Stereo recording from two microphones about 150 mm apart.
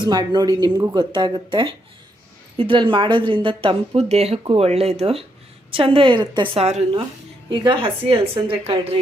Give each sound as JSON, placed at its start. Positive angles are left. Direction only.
{"t": 0.0, "sound": "a woman's voice", "side_deg": -30}
{"t": 7.5, "sound": "a woman's voice", "side_deg": -35}